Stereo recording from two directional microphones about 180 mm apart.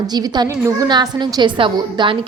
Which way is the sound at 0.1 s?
20° right (ahead or behind).